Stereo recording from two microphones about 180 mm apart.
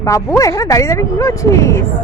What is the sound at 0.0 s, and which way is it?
Speech, 20° left (ahead or behind).